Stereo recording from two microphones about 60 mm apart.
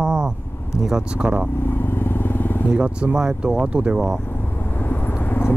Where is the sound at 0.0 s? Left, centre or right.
Centre.